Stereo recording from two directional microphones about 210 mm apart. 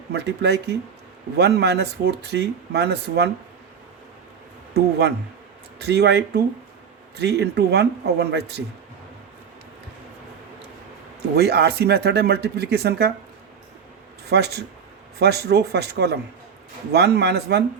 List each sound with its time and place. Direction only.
0.1 s speech: 50° right (ahead or behind)
4.7 s speech: 50° right (ahead or behind)
11.3 s speech: 50° right (ahead or behind)
14.3 s speech: 50° right (ahead or behind)